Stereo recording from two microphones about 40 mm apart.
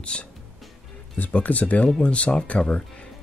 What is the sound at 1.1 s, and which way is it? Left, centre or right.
Speech, left.